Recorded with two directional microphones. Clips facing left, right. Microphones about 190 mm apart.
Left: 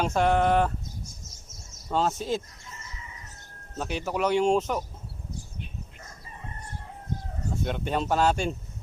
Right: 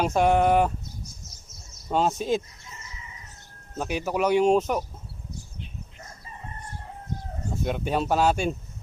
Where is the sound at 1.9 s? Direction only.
15° right (ahead or behind).